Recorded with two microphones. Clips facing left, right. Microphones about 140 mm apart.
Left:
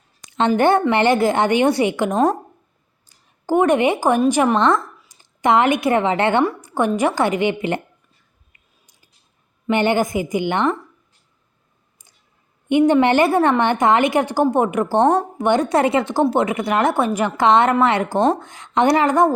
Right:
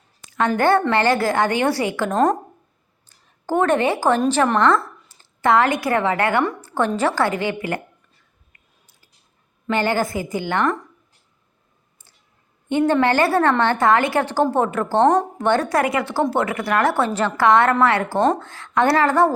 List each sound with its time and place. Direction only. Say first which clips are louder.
0.2 s speech: left 3 dB; 20° left (ahead or behind)
2.1 s a woman's voice: even; 5° left (ahead or behind); by 7.8 s 20° left (ahead or behind)
9.6 s speech: left 3 dB; 20° left (ahead or behind)
12.6 s a woman's voice: left 3 dB; 20° left (ahead or behind)
15.4 s a woman's voice: left 4 dB; 20° left (ahead or behind)